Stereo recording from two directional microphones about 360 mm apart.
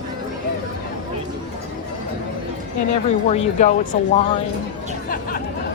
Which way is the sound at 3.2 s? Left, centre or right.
Centre.